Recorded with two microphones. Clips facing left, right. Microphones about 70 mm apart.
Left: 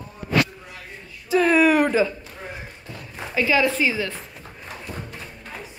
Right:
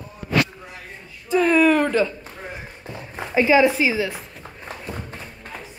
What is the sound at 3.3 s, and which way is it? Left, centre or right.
Speech, right.